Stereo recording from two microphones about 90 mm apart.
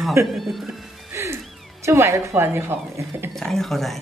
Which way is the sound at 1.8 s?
30° right (ahead or behind).